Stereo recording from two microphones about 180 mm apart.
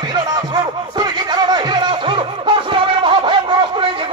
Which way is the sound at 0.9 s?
25° right (ahead or behind).